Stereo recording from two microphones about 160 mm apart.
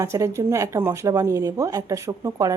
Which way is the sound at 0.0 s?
20° right (ahead or behind).